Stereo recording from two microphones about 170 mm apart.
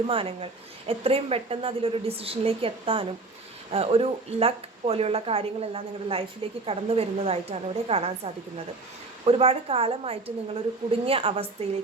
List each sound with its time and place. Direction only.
0.1 s a woman's voice: 35° right (ahead or behind)